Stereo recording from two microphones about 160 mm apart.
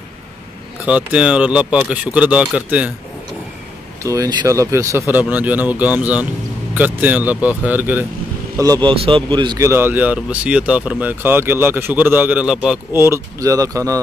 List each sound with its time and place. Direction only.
0.8 s speech: 5° right (ahead or behind)
4.0 s speech: 20° right (ahead or behind)
8.8 s a man's voice: 30° right (ahead or behind)
9.7 s speech: 15° right (ahead or behind)